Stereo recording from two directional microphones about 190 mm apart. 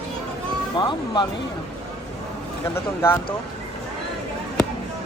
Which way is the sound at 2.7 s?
15° left (ahead or behind).